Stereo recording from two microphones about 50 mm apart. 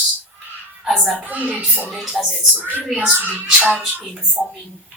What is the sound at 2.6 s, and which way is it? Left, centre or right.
Speech, right.